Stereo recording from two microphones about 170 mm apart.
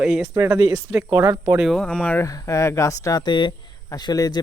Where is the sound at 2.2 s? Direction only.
20° left (ahead or behind).